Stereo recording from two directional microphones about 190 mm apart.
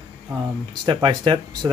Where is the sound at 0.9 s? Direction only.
25° right (ahead or behind).